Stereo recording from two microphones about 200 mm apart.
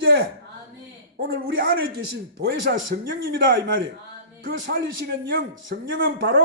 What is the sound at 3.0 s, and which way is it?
Speech, 60° right (ahead or behind).